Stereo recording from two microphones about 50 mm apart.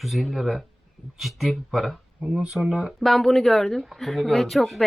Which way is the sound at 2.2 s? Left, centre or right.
Centre.